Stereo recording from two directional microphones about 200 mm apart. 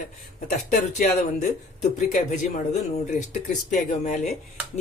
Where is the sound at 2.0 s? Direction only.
35° left (ahead or behind).